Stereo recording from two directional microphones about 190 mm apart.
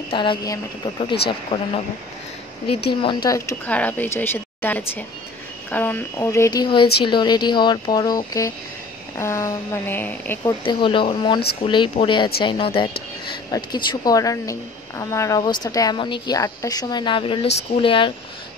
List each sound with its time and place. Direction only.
0.1 s a woman's voice: 25° left (ahead or behind)
2.9 s a woman's voice: 25° left (ahead or behind)
10.4 s a woman's voice: 25° left (ahead or behind)